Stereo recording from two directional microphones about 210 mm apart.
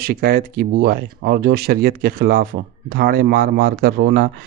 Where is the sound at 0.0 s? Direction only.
45° right (ahead or behind).